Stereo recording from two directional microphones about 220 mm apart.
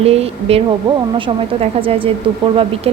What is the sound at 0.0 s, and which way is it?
Speech, 25° right (ahead or behind).